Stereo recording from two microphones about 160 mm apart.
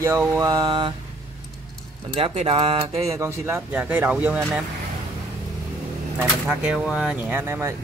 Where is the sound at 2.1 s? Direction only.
40° right (ahead or behind).